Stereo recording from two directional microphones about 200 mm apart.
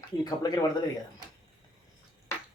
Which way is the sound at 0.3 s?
20° left (ahead or behind).